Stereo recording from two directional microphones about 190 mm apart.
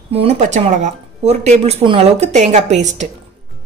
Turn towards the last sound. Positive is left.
turn(degrees=-40)  # may be behind; listen again after turning